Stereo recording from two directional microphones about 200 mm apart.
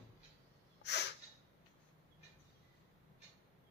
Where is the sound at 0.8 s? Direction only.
55° left (ahead or behind).